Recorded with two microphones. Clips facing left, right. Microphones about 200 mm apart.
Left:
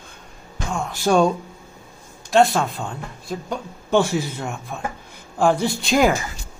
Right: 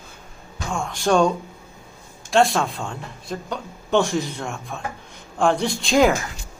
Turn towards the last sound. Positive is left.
turn(degrees=5)  # may be behind; listen again after turning